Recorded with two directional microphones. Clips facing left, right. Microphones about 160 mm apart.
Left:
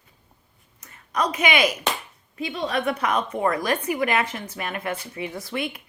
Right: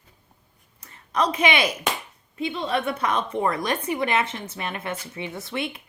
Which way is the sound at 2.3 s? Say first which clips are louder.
Right 1 dB; 30° right (ahead or behind).